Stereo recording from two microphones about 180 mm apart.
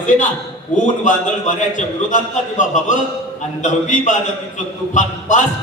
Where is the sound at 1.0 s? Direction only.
45° left (ahead or behind).